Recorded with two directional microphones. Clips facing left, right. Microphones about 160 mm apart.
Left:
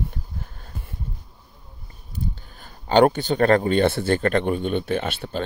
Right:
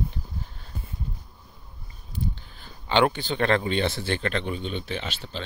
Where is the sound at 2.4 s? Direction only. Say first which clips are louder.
Left 2 dB; 45° left (ahead or behind).